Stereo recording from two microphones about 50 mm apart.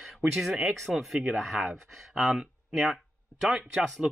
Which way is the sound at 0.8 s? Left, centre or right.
Centre.